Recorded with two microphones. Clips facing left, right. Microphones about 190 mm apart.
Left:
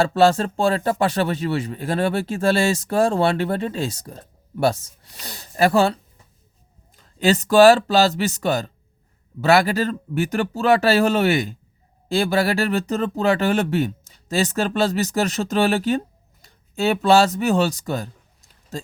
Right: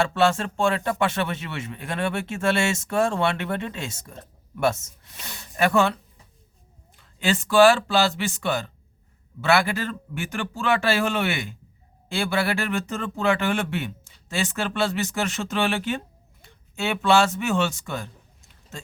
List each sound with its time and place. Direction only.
0.0 s speech: 35° left (ahead or behind)